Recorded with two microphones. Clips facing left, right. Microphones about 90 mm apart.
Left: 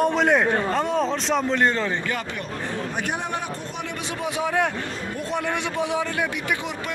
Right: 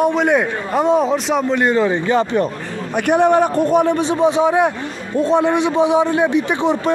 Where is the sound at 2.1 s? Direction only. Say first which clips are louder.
Right 13 dB; 30° right (ahead or behind).